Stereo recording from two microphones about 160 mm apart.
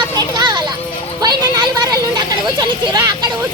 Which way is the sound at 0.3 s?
25° right (ahead or behind).